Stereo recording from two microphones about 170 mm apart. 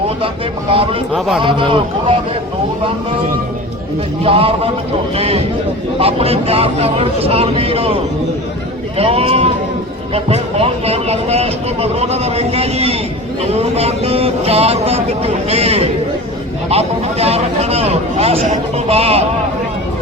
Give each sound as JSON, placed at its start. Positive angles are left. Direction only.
{"t": 0.7, "sound": "speech", "side_deg": -35}
{"t": 4.2, "sound": "speech", "side_deg": -35}
{"t": 9.0, "sound": "speech", "side_deg": -35}